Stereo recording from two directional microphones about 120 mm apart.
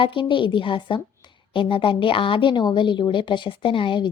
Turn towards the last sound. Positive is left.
turn(degrees=40)  # may be behind; listen again after turning